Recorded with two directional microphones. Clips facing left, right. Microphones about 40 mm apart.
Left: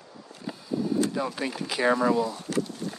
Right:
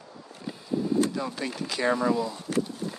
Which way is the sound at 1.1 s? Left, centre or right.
Centre.